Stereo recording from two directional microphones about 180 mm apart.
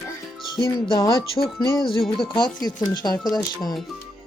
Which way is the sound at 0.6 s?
15° left (ahead or behind).